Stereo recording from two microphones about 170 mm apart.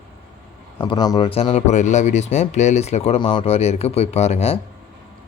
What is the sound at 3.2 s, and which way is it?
A man's voice, 30° left (ahead or behind).